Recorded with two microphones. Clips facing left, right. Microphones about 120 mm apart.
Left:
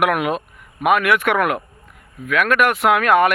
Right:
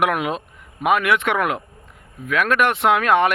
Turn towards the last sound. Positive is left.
turn(degrees=-25)  # may be behind; listen again after turning